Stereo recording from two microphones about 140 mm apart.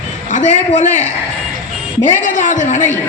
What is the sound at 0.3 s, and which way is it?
Speech, 60° left (ahead or behind).